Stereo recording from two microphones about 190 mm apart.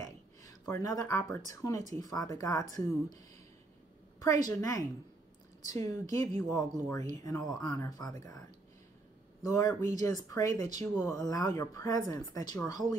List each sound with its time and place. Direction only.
0.0 s a sound: 20° left (ahead or behind)
1.5 s speech: 20° left (ahead or behind)
4.2 s speech: 20° left (ahead or behind)
9.5 s speech: 20° left (ahead or behind)